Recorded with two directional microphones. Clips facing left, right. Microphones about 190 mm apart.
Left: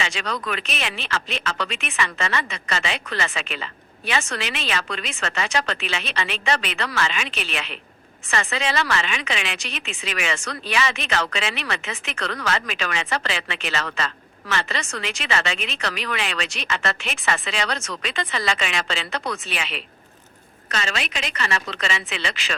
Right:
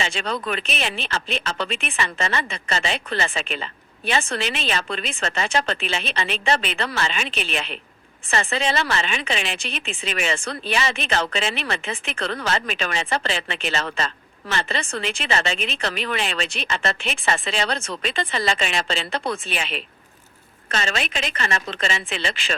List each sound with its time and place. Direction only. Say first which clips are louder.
0.0 s a woman's voice: right 2 dB; 30° right (ahead or behind)
21.3 s a woman's voice: even; 50° right (ahead or behind)